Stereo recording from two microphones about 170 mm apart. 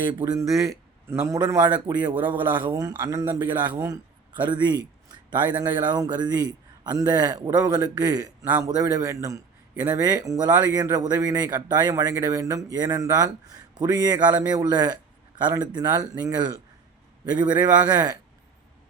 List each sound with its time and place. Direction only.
0.0 s a man's voice: 25° right (ahead or behind)
8.4 s speech: 10° right (ahead or behind)
8.7 s a man's voice: 20° right (ahead or behind)